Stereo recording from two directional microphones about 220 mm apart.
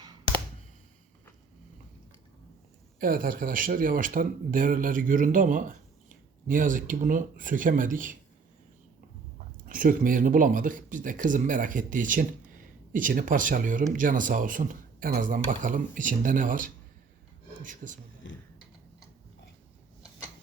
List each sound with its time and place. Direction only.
3.0 s speech: 40° right (ahead or behind)
9.6 s speech: 40° right (ahead or behind)